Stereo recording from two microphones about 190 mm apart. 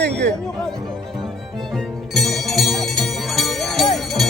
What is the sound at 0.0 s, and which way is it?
Chatter, 60° right (ahead or behind).